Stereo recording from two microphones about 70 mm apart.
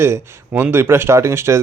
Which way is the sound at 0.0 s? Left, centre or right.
Right.